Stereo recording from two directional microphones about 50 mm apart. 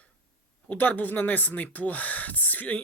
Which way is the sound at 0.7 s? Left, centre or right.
Left.